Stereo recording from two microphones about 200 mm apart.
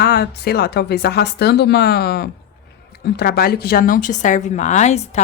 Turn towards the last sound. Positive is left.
turn(degrees=35)  # may be behind; listen again after turning